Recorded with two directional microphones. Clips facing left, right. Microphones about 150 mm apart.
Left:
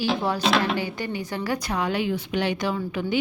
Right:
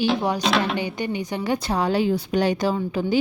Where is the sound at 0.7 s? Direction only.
20° right (ahead or behind).